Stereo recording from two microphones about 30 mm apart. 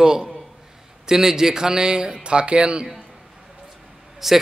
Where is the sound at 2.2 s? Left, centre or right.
Right.